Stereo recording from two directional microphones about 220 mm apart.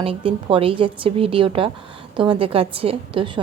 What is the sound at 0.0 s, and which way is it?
A woman's voice, 25° right (ahead or behind).